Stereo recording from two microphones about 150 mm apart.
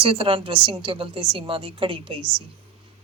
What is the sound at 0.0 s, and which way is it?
A woman's voice, 35° right (ahead or behind).